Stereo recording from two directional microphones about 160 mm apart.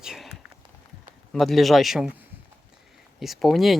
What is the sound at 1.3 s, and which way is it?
Speech, centre (ahead or behind).